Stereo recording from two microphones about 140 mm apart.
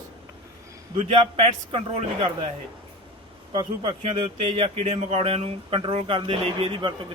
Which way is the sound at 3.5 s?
40° right (ahead or behind).